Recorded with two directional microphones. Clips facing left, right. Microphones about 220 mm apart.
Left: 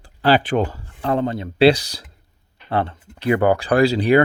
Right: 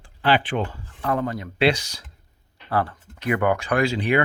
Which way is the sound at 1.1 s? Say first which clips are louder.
Left 4 dB; 25° left (ahead or behind).